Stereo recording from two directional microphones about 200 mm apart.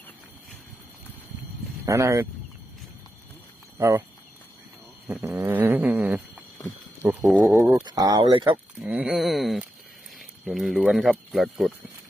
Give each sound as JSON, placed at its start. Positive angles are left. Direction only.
{"t": 1.8, "sound": "speech", "side_deg": -15}
{"t": 3.8, "sound": "speech", "side_deg": -15}
{"t": 5.0, "sound": "cat", "side_deg": -10}
{"t": 7.0, "sound": "speech", "side_deg": -15}
{"t": 7.3, "sound": "cat", "side_deg": -10}
{"t": 7.9, "sound": "speech", "side_deg": -20}
{"t": 8.8, "sound": "speech", "side_deg": -5}